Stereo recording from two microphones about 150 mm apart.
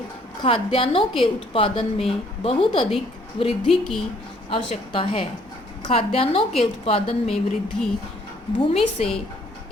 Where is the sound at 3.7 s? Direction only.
5° left (ahead or behind).